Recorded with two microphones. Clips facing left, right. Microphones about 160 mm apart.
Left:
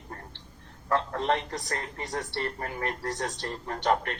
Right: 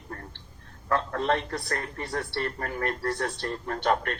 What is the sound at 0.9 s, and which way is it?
A woman's voice, 25° left (ahead or behind).